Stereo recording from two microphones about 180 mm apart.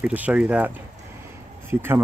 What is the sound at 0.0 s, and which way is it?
Speech, 10° right (ahead or behind).